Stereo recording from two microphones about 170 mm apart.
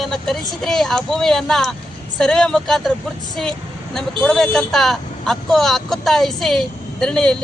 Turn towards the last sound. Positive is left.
turn(degrees=5)  # may be behind; listen again after turning